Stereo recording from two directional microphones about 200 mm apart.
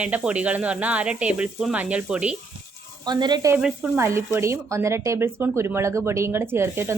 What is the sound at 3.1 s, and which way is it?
Speech, 20° right (ahead or behind).